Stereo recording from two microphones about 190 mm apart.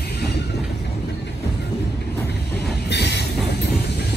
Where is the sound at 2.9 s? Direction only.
65° left (ahead or behind).